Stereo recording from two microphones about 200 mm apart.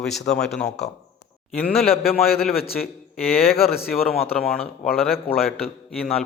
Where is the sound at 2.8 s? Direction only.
5° left (ahead or behind).